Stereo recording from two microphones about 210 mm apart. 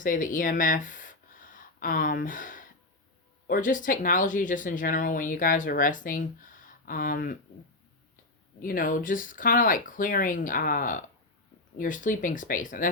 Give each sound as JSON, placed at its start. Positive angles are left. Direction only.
{"t": 0.0, "sound": "speech", "side_deg": 40}
{"t": 8.6, "sound": "speech", "side_deg": 40}